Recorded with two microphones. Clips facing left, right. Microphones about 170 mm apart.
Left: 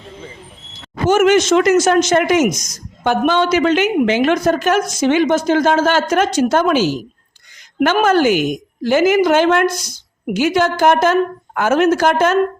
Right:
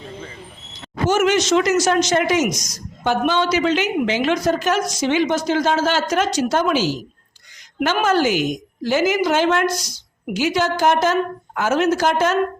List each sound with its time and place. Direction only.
1.0 s a woman's voice: 55° left (ahead or behind)